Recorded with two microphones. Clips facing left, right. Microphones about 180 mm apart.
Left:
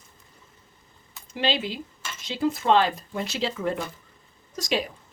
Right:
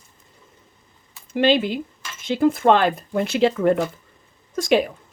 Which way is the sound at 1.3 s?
55° right (ahead or behind).